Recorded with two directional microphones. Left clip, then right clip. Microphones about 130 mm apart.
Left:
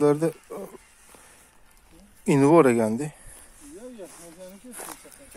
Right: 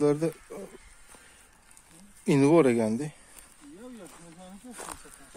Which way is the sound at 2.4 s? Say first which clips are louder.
Left 4 dB; centre (ahead or behind).